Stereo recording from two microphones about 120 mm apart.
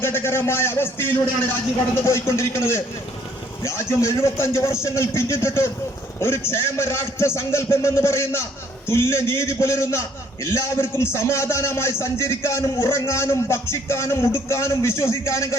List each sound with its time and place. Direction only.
0.0 s a man's voice: 20° left (ahead or behind)